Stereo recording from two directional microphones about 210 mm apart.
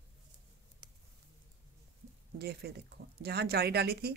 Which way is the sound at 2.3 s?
50° right (ahead or behind).